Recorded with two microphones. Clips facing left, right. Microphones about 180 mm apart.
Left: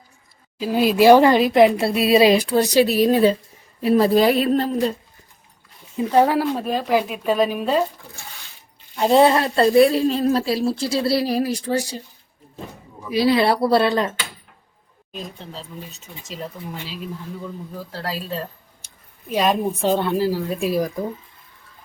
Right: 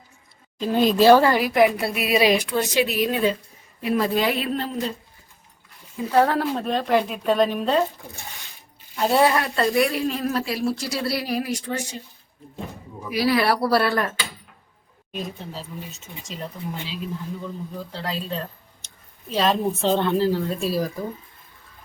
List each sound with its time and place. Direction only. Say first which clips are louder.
0.6 s speech: left 2 dB; 5° left (ahead or behind); by 4.8 s 40° left (ahead or behind)
6.0 s speech: left 3 dB; 15° left (ahead or behind)
9.0 s speech: left 4 dB; 20° left (ahead or behind)
13.1 s speech: left 3 dB; 25° left (ahead or behind)
15.1 s speech: right 2 dB; centre (ahead or behind)
18.8 s vehicle: even; 10° left (ahead or behind)
19.3 s speech: left 2 dB; 15° left (ahead or behind)